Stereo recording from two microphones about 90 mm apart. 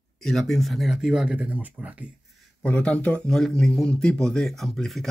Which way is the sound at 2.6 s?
15° left (ahead or behind).